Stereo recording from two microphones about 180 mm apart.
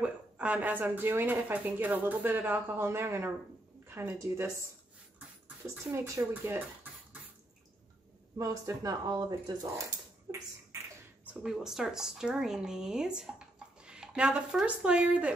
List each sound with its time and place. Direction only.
0.0 s speech: 5° right (ahead or behind)
5.9 s speech: 15° right (ahead or behind)
8.4 s speech: 20° right (ahead or behind)
11.2 s speech: 5° right (ahead or behind)